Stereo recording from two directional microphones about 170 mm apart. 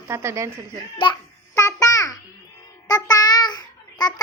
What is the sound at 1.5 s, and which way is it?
Babbling, 15° left (ahead or behind).